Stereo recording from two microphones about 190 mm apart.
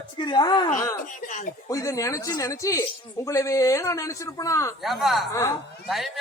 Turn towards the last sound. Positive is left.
turn(degrees=0)  # may be behind; listen again after turning